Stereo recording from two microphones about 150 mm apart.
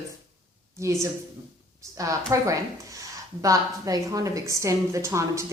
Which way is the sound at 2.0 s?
20° right (ahead or behind).